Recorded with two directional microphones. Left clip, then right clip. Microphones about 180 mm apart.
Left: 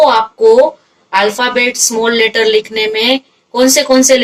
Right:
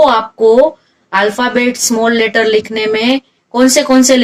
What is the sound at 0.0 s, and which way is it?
Speech, 45° right (ahead or behind).